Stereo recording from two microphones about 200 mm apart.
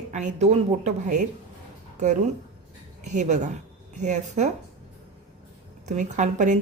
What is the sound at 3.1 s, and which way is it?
Speech, 35° right (ahead or behind).